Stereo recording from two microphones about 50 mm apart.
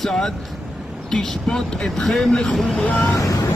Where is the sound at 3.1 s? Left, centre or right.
Left.